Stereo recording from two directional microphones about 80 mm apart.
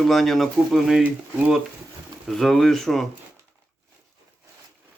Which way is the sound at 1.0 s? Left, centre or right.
Centre.